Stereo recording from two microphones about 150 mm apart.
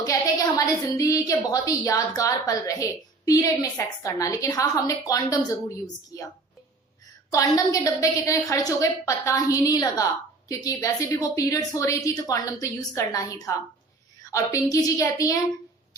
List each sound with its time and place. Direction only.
0.0 s a woman's voice: 20° left (ahead or behind)